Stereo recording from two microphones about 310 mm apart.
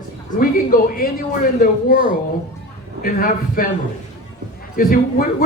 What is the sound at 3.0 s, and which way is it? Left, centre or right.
Speech, left.